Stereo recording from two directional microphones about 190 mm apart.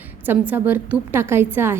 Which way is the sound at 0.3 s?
10° right (ahead or behind).